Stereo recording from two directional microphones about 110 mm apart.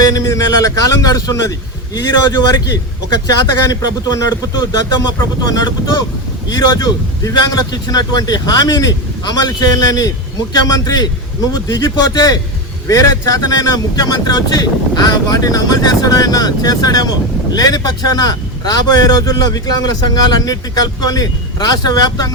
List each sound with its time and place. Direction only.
0.0 s speech: 30° left (ahead or behind)